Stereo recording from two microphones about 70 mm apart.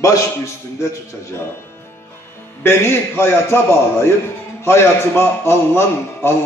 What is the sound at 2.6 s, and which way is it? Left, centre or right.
A man's voice, left.